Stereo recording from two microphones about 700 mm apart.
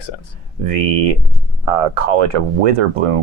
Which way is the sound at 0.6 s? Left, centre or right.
Right.